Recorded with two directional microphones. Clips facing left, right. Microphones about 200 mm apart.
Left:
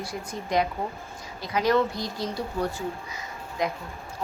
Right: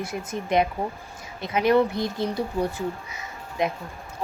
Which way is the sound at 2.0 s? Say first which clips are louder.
Right 5 dB; 55° right (ahead or behind).